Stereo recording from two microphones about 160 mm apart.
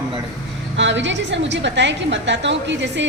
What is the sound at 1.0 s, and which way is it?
A woman's voice, 90° right.